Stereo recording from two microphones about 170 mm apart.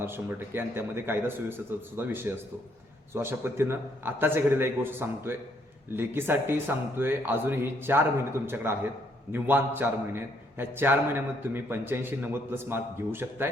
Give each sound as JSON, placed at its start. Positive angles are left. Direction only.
{"t": 0.0, "sound": "a man's voice", "side_deg": -15}